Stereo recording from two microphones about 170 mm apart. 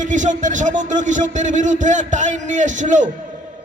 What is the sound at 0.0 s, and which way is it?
A man's voice, 45° right (ahead or behind).